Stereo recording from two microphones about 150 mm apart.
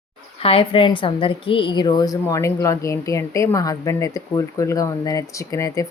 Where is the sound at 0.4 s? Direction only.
40° left (ahead or behind).